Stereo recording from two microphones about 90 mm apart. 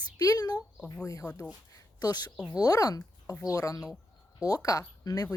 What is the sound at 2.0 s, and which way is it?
A woman's voice, 45° left (ahead or behind).